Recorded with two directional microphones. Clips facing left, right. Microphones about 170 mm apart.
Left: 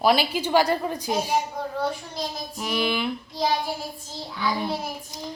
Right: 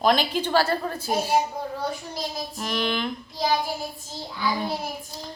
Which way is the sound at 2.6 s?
5° left (ahead or behind).